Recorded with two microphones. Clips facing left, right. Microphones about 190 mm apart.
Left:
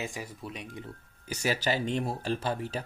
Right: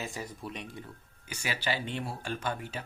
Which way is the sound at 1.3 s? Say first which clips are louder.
Left 5 dB; 40° left (ahead or behind).